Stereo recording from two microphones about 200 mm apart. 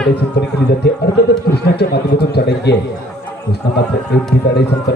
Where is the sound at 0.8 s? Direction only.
55° left (ahead or behind).